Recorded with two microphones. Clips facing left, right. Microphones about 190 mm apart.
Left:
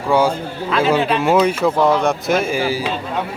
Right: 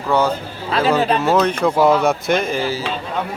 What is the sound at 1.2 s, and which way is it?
Speech, 10° left (ahead or behind).